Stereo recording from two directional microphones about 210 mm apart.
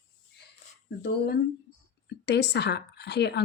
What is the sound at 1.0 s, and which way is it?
Speech, 50° left (ahead or behind).